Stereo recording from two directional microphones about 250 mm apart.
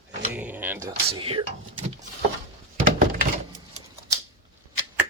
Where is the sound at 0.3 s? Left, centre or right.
Centre.